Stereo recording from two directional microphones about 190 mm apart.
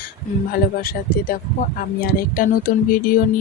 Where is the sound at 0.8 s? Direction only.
50° left (ahead or behind).